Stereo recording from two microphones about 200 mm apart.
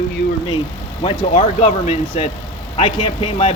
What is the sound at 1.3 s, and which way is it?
Speech, 40° left (ahead or behind).